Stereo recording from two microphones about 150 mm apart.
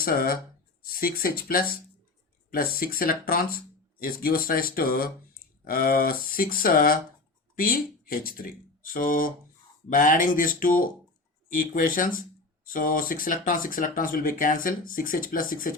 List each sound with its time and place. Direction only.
0.0 s speech: 75° left (ahead or behind)